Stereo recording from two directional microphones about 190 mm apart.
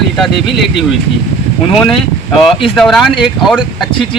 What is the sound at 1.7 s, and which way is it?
Speech, 30° left (ahead or behind).